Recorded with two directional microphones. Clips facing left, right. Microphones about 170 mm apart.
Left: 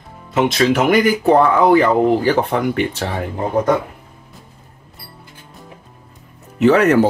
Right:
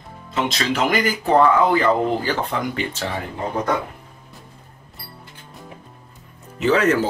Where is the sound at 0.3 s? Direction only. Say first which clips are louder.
Left 8 dB; 55° left (ahead or behind).